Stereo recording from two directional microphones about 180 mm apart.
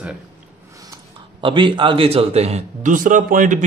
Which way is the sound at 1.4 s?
25° right (ahead or behind).